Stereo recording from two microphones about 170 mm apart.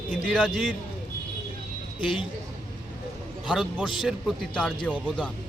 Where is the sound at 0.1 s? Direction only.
5° left (ahead or behind).